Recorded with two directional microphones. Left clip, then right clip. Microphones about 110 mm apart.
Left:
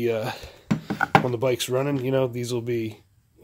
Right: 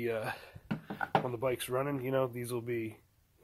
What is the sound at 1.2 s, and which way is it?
Speech, 25° left (ahead or behind).